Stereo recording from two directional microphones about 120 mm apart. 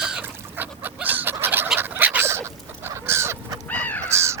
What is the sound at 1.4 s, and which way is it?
Fowl, 15° right (ahead or behind).